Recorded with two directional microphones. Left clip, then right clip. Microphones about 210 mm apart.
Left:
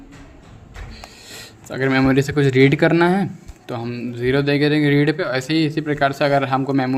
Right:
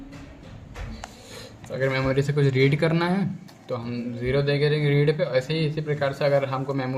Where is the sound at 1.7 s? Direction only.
45° left (ahead or behind).